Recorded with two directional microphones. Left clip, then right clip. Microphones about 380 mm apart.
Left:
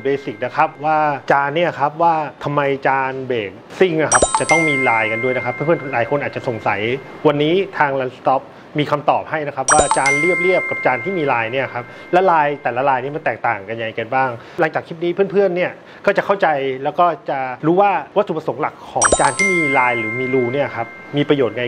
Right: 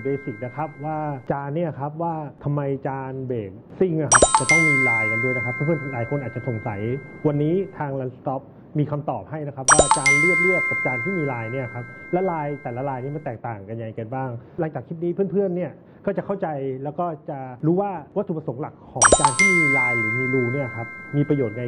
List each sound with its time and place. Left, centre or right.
0.0 s speech: centre
18.3 s speech: centre
18.6 s speech: centre